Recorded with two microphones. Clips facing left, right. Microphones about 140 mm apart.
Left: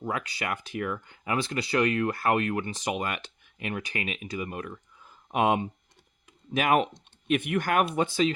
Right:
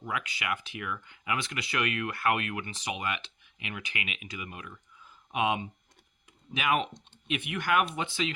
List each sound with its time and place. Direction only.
0.0 s speech: 35° left (ahead or behind)